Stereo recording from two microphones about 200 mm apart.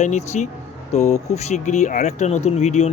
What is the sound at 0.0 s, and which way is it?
Speech, 35° left (ahead or behind).